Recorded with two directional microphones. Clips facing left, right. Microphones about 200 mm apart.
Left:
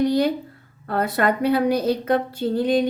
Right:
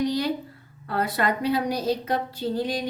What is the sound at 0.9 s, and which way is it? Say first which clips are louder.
Speech: left 4 dB; 50° left (ahead or behind).